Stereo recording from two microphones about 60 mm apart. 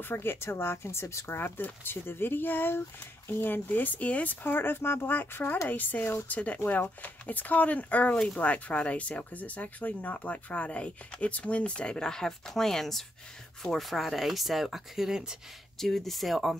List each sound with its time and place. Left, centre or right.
0.0 s speech: left; by 15.3 s centre
15.8 s speech: centre